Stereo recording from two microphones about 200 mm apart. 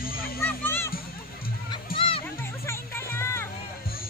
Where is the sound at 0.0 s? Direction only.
45° left (ahead or behind).